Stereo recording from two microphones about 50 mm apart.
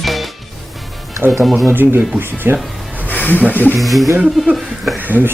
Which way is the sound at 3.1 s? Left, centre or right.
Left.